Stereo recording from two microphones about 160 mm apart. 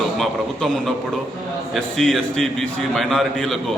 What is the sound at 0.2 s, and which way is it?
A man's voice, centre (ahead or behind).